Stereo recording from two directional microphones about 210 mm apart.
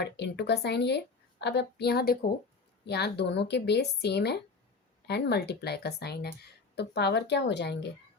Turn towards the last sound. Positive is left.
turn(degrees=55)  # may be behind; listen again after turning